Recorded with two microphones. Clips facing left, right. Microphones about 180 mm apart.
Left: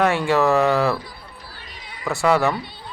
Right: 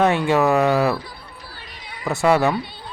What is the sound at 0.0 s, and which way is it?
Speech, 20° right (ahead or behind).